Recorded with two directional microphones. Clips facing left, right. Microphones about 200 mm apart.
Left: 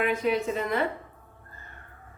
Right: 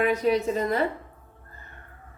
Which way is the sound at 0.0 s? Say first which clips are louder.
Right 3 dB; 40° right (ahead or behind).